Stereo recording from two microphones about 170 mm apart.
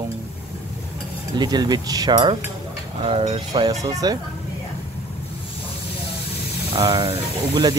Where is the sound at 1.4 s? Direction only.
25° right (ahead or behind).